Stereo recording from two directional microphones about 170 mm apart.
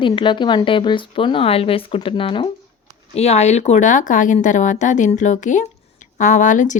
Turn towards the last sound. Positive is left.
turn(degrees=45)  # may be behind; listen again after turning